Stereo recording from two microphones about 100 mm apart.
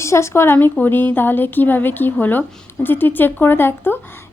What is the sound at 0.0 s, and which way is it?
Speech, 30° left (ahead or behind).